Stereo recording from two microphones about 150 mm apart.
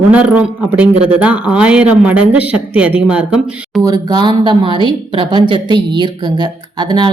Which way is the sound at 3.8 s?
25° right (ahead or behind).